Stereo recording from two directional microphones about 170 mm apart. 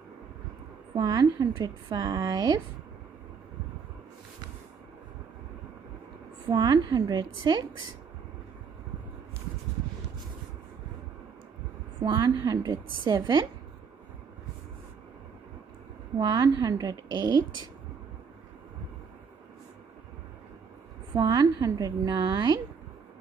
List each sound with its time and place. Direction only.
0.9 s a woman's voice: 25° right (ahead or behind)
6.5 s a woman's voice: 25° right (ahead or behind)
12.0 s a woman's voice: 25° right (ahead or behind)
16.2 s a woman's voice: 25° right (ahead or behind)
21.1 s a woman's voice: 25° right (ahead or behind)